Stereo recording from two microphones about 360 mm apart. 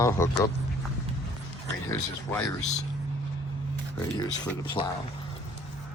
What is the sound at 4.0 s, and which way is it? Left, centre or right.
Speech, centre.